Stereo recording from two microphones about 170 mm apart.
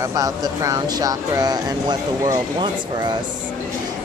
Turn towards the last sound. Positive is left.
turn(degrees=-25)  # may be behind; listen again after turning